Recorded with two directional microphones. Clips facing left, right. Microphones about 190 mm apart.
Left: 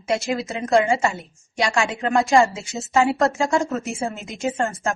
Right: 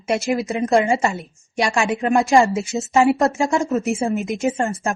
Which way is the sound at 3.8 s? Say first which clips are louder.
Right 7 dB; 60° right (ahead or behind).